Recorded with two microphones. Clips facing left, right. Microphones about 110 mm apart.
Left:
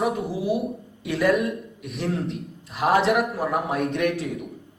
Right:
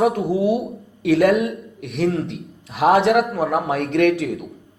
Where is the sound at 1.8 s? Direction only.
80° right.